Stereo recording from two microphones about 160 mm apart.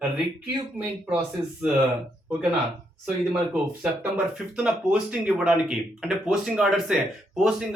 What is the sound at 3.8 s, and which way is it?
Speech, 5° right (ahead or behind).